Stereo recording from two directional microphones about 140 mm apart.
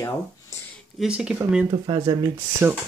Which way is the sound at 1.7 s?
35° right (ahead or behind).